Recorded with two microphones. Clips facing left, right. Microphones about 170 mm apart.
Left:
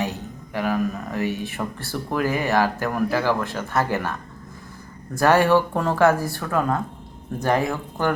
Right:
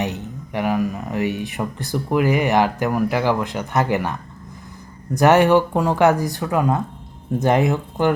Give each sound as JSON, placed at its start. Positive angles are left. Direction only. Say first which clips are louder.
{"t": 0.0, "sound": "speech", "louder": "right 2 dB", "side_deg": -20}
{"t": 5.1, "sound": "speech", "louder": "right 3 dB", "side_deg": -20}